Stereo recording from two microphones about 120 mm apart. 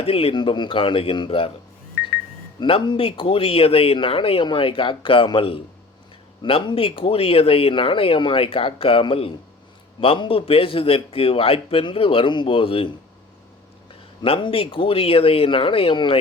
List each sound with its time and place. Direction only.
0.0 s speech: 55° left (ahead or behind)
2.6 s speech: 45° left (ahead or behind)
14.3 s speech: 50° left (ahead or behind)